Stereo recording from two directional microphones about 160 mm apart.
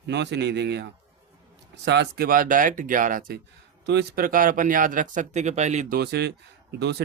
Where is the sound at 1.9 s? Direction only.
85° right; by 3.4 s 65° right (ahead or behind).